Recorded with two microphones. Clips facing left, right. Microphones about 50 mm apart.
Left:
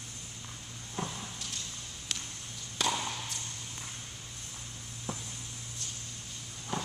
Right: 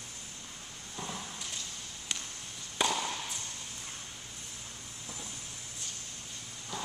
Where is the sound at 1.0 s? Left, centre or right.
Left.